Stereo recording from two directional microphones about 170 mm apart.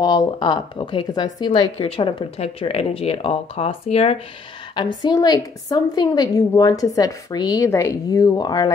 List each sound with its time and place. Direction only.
0.0 s a woman's voice: 25° left (ahead or behind)